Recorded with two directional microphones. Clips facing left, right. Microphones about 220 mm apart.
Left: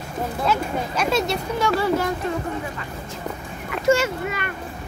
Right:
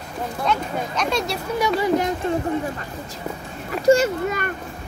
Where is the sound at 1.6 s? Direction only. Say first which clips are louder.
Right 2 dB; 15° right (ahead or behind).